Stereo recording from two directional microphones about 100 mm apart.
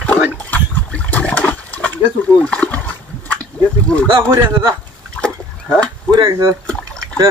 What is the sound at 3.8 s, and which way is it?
Speech, 10° left (ahead or behind).